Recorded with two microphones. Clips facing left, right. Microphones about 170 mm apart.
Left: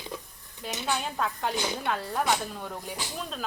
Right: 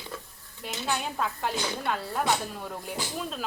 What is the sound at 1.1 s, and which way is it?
Speech, centre (ahead or behind).